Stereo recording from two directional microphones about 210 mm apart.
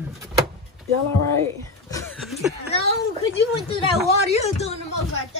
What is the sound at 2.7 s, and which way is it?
Speech, 25° left (ahead or behind).